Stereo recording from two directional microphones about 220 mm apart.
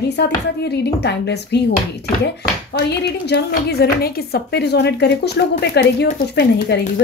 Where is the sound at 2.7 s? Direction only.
50° left (ahead or behind).